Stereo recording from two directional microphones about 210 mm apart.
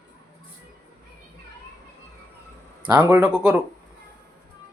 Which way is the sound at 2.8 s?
20° right (ahead or behind).